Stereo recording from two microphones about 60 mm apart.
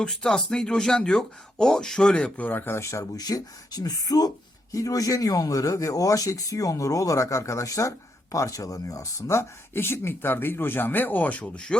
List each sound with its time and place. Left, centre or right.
0.0 s speech: centre
2.4 s speech: left
2.7 s speech: left
4.7 s speech: left; by 11.8 s centre